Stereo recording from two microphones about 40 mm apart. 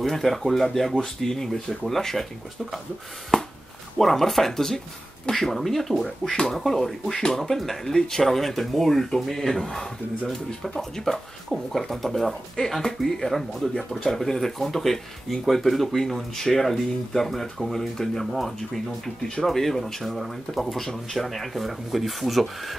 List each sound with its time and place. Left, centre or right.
0.0 s speech: centre
3.3 s a sound: centre
4.0 s speech: centre
18.2 s speech: centre
18.6 s speech: centre
19.4 s speech: centre